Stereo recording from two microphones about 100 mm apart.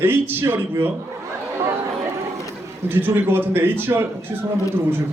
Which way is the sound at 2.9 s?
20° right (ahead or behind).